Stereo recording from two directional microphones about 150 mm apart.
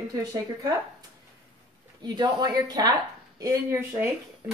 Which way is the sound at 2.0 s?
30° right (ahead or behind).